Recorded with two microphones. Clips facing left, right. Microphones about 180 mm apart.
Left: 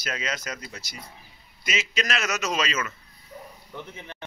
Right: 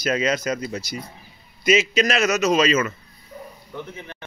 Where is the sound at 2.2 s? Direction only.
25° right (ahead or behind).